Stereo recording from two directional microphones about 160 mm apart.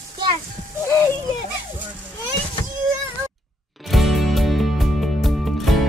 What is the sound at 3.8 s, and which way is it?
Music, centre (ahead or behind).